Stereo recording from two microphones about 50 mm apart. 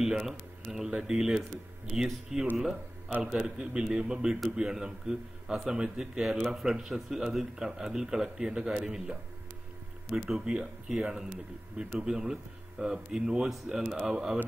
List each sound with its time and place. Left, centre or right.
0.0 s a man's voice: centre
10.1 s a man's voice: centre